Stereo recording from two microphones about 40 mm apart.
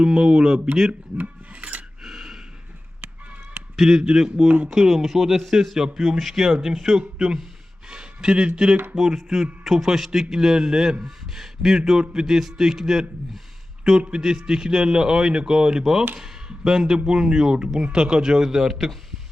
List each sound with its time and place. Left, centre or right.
0.0 s a man's voice: centre
1.2 s cutlery: right
2.0 s a sound: centre
3.8 s a man's voice: centre
4.4 s speech: right
4.7 s a man's voice: centre
14.1 s a man's voice: centre